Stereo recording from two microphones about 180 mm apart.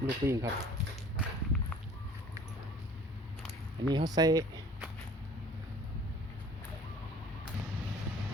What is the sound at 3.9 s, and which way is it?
Speech, 20° right (ahead or behind).